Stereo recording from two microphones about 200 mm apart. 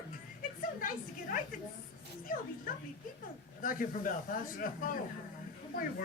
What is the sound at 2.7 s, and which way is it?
Speech, 45° left (ahead or behind).